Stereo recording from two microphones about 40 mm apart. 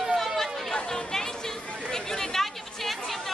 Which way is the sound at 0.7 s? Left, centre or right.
Centre.